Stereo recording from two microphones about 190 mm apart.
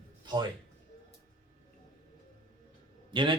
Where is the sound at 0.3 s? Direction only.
20° right (ahead or behind).